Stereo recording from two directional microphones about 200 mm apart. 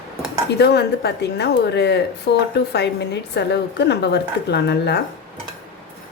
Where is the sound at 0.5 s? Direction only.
55° left (ahead or behind).